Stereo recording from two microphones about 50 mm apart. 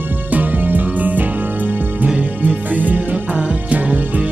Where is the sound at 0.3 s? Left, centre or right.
Right.